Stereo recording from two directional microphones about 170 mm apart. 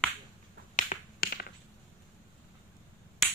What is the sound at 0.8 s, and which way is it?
Finger snapping, 55° left (ahead or behind).